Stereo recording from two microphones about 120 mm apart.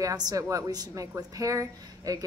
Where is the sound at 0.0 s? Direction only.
30° right (ahead or behind).